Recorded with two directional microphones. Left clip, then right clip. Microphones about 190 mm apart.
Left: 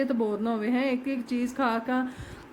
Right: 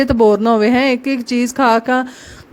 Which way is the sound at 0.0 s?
55° right (ahead or behind).